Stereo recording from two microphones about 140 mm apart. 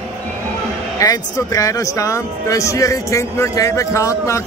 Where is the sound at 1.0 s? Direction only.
25° left (ahead or behind).